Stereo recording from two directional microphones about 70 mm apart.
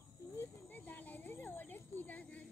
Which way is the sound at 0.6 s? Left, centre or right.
Left.